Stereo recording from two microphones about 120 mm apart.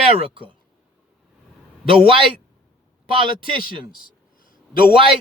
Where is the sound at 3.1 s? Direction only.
45° right (ahead or behind).